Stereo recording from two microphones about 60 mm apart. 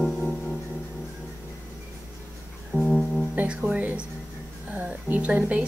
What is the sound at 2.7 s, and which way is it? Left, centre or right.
Music, right.